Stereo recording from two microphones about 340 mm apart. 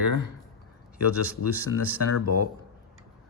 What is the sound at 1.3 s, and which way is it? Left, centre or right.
Mechanisms, centre.